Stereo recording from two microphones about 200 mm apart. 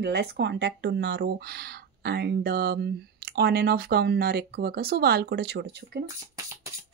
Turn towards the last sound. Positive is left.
turn(degrees=-55)  # may be behind; listen again after turning